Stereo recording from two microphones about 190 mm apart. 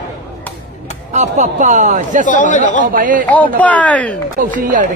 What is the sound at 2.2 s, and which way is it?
Speech, 40° left (ahead or behind).